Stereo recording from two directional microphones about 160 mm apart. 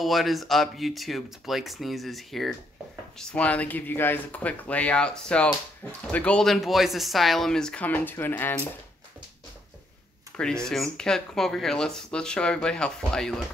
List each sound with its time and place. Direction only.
0.0 s speech: centre (ahead or behind)
10.3 s speech: 5° left (ahead or behind)